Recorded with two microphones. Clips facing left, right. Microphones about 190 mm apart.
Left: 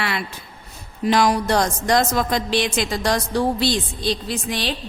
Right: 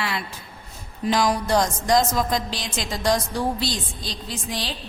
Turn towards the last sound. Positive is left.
turn(degrees=65)  # may be behind; listen again after turning